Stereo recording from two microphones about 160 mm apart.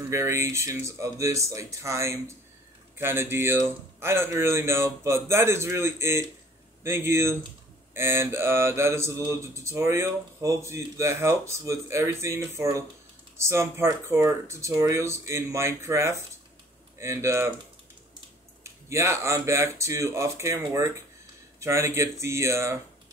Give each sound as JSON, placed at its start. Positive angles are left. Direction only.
{"t": 0.1, "sound": "speech", "side_deg": -15}
{"t": 18.6, "sound": "speech", "side_deg": -15}